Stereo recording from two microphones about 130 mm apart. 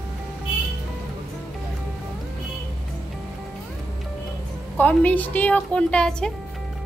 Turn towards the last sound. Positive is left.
turn(degrees=5)  # may be behind; listen again after turning